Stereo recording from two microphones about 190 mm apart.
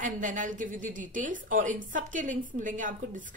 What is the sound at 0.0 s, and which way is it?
Speech, 40° right (ahead or behind).